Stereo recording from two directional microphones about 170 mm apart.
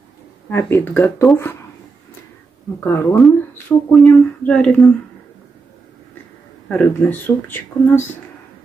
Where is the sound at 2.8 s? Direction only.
5° left (ahead or behind).